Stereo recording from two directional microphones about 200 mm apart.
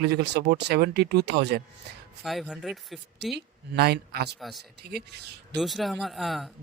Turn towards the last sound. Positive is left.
turn(degrees=0)  # may be behind; listen again after turning